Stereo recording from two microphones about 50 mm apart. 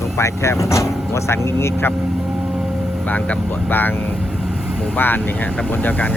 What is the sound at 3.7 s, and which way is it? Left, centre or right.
Speech, left.